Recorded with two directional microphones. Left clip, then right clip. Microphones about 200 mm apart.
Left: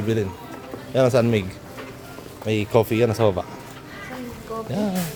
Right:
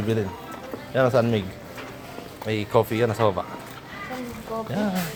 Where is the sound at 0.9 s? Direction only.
40° left (ahead or behind).